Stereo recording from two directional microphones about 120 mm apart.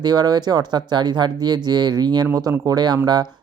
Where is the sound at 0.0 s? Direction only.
35° right (ahead or behind).